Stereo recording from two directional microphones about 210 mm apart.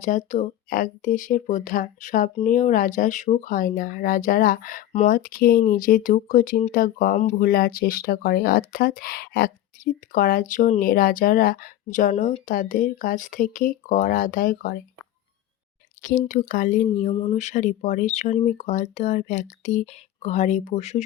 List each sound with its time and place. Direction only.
0.0 s speech: 35° left (ahead or behind)
16.0 s speech: 35° left (ahead or behind)